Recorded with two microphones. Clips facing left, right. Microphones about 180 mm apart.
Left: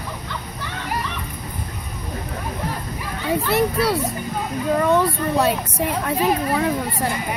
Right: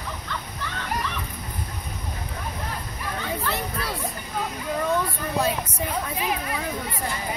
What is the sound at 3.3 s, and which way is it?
Children playing, 75° left (ahead or behind).